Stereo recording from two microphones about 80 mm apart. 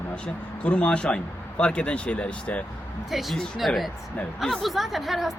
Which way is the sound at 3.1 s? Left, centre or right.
Centre.